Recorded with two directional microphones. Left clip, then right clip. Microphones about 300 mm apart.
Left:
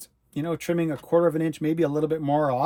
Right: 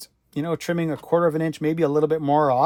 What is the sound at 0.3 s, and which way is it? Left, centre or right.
Speech, right.